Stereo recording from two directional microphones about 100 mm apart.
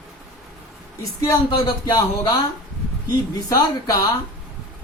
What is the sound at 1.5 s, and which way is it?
Speech, 45° left (ahead or behind).